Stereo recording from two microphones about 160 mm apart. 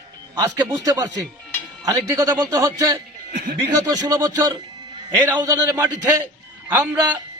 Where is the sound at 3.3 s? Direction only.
60° right (ahead or behind).